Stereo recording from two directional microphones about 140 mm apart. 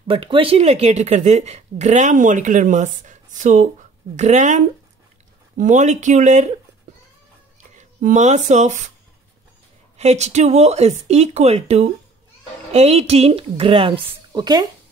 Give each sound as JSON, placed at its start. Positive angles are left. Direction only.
{"t": 0.1, "sound": "speech", "side_deg": -40}
{"t": 7.7, "sound": "speech", "side_deg": -60}
{"t": 9.9, "sound": "speech", "side_deg": -50}